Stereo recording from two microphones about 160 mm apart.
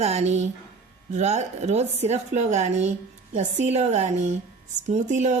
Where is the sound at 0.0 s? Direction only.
40° right (ahead or behind).